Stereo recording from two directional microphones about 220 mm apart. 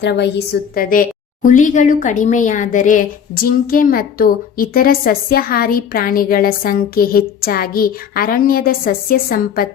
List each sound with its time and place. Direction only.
0.0 s a woman's voice: 50° left (ahead or behind)